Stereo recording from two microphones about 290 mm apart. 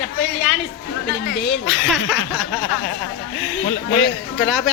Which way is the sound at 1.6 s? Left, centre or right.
Centre.